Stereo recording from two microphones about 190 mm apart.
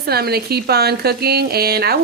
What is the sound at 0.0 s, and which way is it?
Speech, 55° right (ahead or behind).